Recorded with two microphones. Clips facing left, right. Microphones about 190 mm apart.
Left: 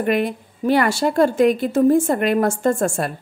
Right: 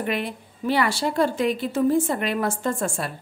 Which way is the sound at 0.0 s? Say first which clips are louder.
Left 7 dB; 50° left (ahead or behind).